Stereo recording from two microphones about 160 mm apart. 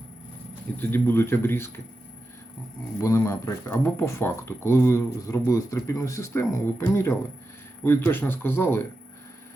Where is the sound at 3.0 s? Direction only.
20° left (ahead or behind).